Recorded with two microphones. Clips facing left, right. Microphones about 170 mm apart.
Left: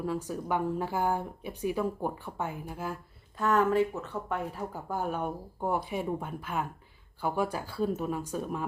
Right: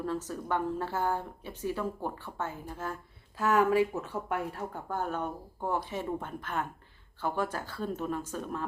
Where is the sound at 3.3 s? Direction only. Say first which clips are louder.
Even; 5° right (ahead or behind).